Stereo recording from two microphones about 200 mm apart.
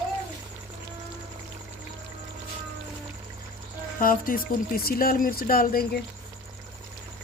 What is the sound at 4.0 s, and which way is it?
Speech, 45° left (ahead or behind).